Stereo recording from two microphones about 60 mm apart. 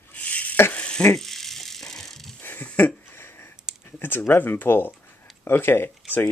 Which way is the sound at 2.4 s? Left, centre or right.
Left.